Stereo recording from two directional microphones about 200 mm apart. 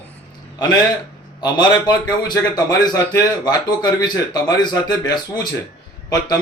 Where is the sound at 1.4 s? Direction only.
20° left (ahead or behind).